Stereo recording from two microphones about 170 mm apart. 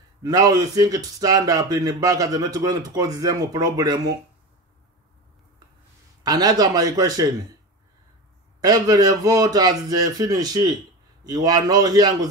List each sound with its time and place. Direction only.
0.2 s speech: 20° right (ahead or behind)
6.2 s speech: 25° right (ahead or behind)
8.5 s speech: 20° right (ahead or behind)